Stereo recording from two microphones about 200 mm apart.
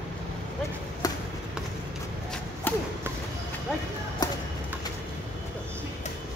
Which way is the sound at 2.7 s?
10° left (ahead or behind).